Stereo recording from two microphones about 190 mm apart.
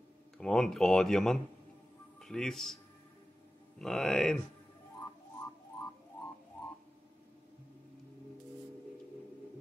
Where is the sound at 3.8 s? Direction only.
Centre (ahead or behind).